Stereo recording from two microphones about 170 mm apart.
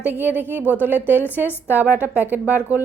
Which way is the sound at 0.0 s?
10° right (ahead or behind).